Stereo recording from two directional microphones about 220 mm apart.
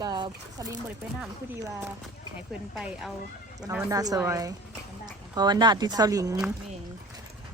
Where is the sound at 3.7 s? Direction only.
10° right (ahead or behind).